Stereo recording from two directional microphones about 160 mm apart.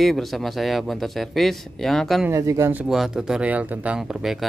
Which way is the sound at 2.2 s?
20° right (ahead or behind).